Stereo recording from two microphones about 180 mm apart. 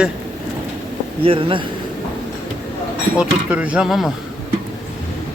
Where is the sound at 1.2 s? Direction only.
30° right (ahead or behind).